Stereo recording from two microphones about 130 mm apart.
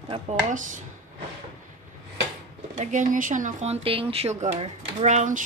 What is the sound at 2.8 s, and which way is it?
Speech, 75° right (ahead or behind).